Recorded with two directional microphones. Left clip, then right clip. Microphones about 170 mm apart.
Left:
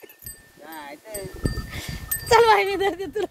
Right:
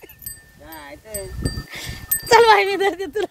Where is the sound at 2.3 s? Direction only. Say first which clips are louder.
Right 4 dB; 25° right (ahead or behind).